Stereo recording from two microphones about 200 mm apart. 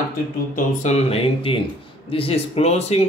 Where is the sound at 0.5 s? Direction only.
35° left (ahead or behind).